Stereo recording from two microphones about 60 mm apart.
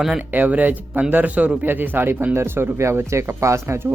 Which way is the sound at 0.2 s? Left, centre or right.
Right.